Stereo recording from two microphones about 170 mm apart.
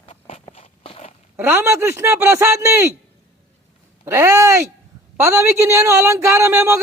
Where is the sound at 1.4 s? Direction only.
15° right (ahead or behind).